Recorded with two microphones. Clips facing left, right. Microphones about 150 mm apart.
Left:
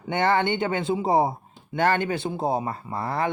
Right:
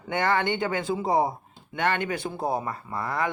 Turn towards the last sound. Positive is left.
turn(degrees=30)  # may be behind; listen again after turning